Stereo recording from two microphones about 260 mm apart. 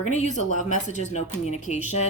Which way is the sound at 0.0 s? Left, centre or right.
Left.